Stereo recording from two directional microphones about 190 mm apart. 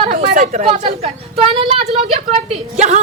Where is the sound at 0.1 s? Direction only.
35° right (ahead or behind).